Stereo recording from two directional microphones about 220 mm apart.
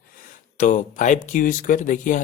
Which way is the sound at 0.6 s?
35° left (ahead or behind).